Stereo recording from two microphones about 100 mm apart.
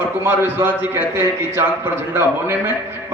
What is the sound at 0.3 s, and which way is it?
A man's voice, 20° right (ahead or behind).